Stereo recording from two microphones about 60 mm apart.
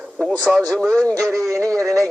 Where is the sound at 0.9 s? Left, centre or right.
Centre.